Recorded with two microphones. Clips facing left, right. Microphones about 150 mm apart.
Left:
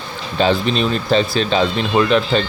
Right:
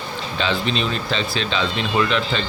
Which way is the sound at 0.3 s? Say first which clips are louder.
Left 7 dB; 45° left (ahead or behind).